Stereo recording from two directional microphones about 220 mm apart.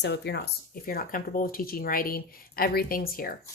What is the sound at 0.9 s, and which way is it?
Speech, 40° left (ahead or behind).